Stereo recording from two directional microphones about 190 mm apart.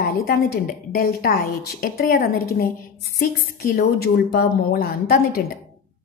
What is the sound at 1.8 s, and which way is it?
A woman's voice, 50° left (ahead or behind).